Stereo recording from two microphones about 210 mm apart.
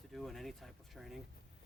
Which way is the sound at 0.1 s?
Centre (ahead or behind).